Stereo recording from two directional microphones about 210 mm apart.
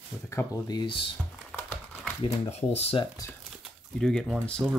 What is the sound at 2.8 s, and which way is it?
Speech, 25° left (ahead or behind).